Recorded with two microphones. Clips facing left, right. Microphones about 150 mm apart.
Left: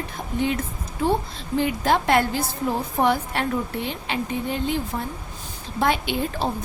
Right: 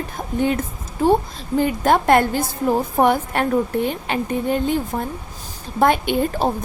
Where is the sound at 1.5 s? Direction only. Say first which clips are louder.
Right 4 dB; 50° right (ahead or behind).